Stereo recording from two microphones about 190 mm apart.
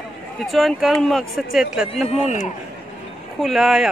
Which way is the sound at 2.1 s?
40° left (ahead or behind).